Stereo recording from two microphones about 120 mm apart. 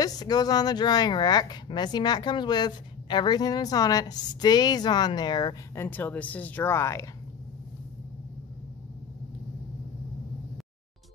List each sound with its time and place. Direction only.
0.0 s speech: 35° left (ahead or behind)
5.8 s speech: 15° left (ahead or behind)